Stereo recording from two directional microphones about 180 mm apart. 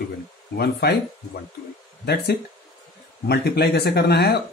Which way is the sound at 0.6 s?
65° left (ahead or behind).